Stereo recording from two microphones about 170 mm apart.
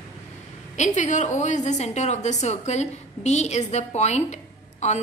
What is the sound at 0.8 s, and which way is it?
A woman's voice, 45° left (ahead or behind).